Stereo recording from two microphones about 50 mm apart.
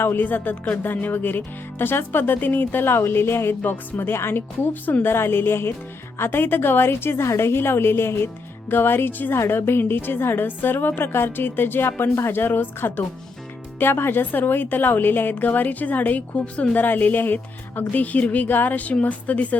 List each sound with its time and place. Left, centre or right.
0.0 s a woman's voice: left
3.6 s a woman's voice: left
5.1 s a woman's voice: left
12.4 s a woman's voice: left